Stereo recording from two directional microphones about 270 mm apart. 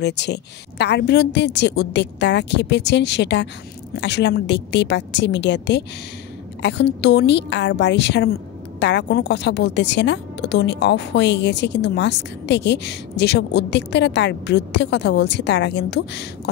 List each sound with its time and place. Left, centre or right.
0.0 s a woman's voice: left